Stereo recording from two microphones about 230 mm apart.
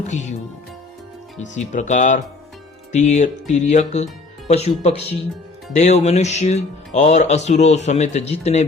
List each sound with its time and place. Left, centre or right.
0.0 s speech: left
1.4 s speech: left